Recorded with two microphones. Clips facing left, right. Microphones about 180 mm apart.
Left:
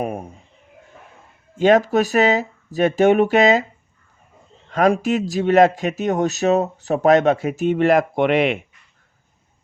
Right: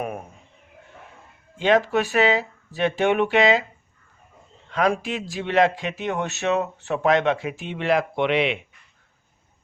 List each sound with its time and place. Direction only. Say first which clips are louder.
0.0 s a sound: left 5 dB; 30° left (ahead or behind)
1.5 s speech: left 5 dB; 45° left (ahead or behind)
4.7 s speech: left 6 dB; 45° left (ahead or behind)